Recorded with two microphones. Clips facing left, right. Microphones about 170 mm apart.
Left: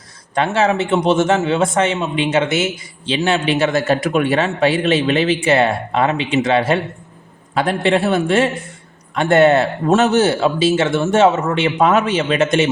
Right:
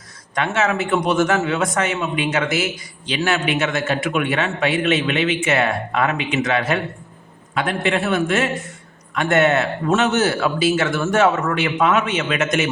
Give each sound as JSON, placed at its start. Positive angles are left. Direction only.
{"t": 0.3, "sound": "a man's voice", "side_deg": 30}